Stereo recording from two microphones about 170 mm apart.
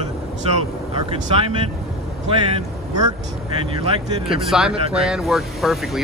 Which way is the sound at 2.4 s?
25° right (ahead or behind).